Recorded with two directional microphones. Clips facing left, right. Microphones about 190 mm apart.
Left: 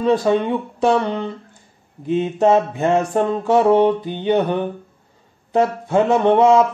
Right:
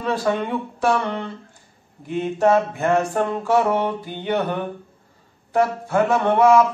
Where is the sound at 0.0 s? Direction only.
20° left (ahead or behind).